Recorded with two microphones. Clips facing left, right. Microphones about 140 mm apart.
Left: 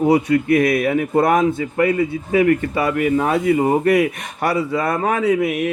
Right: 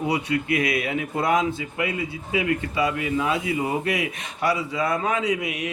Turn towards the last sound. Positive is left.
turn(degrees=55)  # may be behind; listen again after turning